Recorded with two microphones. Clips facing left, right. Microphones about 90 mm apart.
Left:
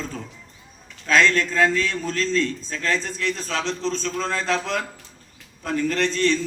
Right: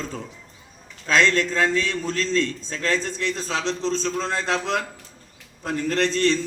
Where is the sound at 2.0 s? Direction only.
25° right (ahead or behind).